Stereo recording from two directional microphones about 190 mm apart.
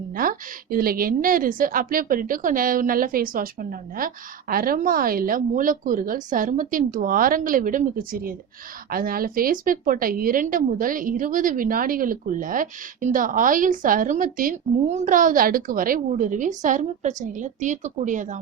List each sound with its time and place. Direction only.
0.1 s a woman's voice: 50° right (ahead or behind)